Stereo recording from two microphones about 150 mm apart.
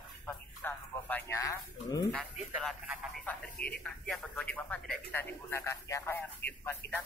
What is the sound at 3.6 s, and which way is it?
Speech, 90° left.